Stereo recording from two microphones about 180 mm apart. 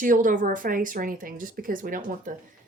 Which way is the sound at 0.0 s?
50° right (ahead or behind).